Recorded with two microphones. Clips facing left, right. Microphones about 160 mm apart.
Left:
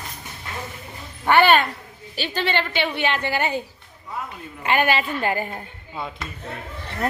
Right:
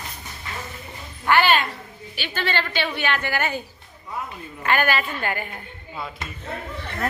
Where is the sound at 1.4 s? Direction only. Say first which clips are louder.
Left 4 dB; 55° left (ahead or behind).